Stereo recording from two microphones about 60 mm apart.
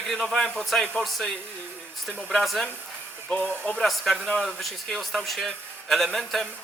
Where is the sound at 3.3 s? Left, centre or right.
Left.